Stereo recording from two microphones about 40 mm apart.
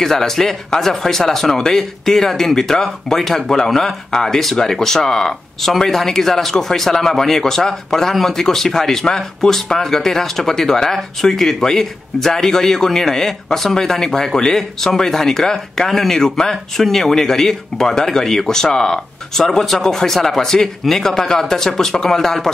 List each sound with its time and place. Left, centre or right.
0.0 s speech: centre